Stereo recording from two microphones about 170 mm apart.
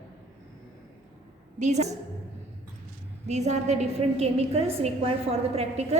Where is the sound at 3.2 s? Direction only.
40° right (ahead or behind).